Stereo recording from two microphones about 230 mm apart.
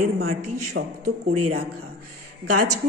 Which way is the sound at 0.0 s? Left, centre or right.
Right.